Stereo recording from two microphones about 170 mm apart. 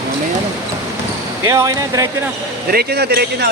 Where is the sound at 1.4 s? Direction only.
20° right (ahead or behind).